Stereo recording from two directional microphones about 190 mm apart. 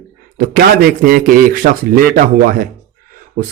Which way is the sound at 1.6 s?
50° right (ahead or behind).